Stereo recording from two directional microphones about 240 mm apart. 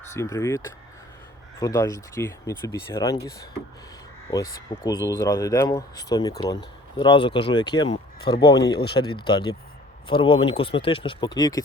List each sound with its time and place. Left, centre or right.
0.1 s speech: centre
4.3 s speech: centre